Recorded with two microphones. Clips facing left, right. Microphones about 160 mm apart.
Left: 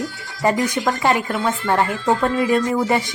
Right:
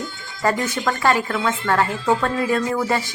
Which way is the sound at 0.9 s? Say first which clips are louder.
Right 2 dB; 20° left (ahead or behind).